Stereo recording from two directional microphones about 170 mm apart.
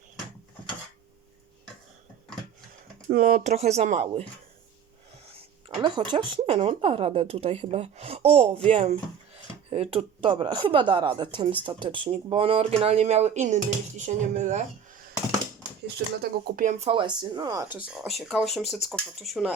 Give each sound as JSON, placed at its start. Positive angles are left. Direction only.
{"t": 3.1, "sound": "speech", "side_deg": -55}
{"t": 5.6, "sound": "speech", "side_deg": -25}
{"t": 16.0, "sound": "speech", "side_deg": -80}
{"t": 16.6, "sound": "speech", "side_deg": -40}
{"t": 18.0, "sound": "speech", "side_deg": 0}